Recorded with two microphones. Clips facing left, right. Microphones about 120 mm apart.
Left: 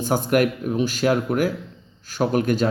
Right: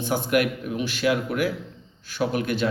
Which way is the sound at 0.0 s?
45° left (ahead or behind).